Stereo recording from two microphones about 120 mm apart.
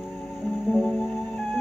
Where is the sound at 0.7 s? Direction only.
10° left (ahead or behind).